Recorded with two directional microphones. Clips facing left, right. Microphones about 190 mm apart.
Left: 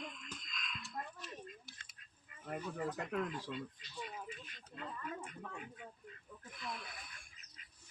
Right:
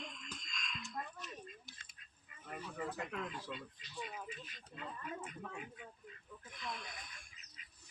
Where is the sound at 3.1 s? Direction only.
45° left (ahead or behind).